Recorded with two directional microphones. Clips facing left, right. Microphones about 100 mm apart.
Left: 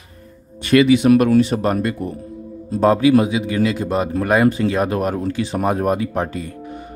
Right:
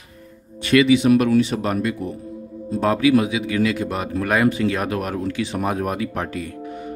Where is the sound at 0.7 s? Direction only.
45° left (ahead or behind).